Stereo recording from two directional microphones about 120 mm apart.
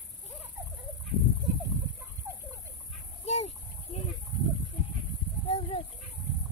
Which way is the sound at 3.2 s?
60° left (ahead or behind).